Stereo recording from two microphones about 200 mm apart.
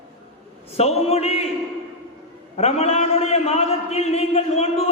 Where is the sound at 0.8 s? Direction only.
30° left (ahead or behind).